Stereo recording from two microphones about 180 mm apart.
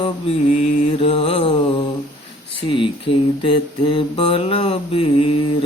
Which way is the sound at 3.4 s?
30° left (ahead or behind).